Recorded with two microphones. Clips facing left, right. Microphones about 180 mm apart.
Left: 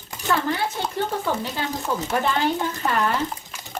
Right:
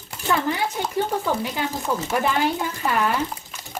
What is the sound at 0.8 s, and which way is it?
Speech, 15° right (ahead or behind).